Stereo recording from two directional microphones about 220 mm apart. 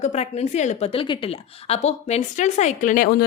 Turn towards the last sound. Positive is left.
turn(degrees=35)  # may be behind; listen again after turning